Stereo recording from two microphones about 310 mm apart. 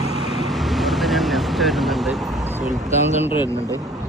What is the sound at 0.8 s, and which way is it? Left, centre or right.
Vehicle, centre.